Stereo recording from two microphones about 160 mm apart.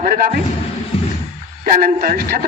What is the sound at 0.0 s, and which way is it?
Speech, 60° right (ahead or behind).